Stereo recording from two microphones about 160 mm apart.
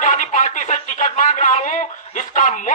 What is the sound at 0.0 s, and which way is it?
Speech, 50° left (ahead or behind).